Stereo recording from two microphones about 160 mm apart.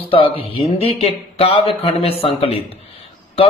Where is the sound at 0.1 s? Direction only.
35° left (ahead or behind).